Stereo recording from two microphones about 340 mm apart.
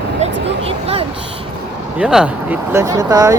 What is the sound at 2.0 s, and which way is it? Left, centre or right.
Speech, centre.